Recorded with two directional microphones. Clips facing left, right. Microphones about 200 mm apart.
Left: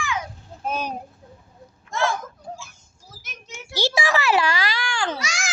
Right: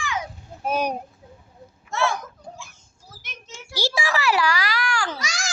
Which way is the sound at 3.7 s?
20° left (ahead or behind).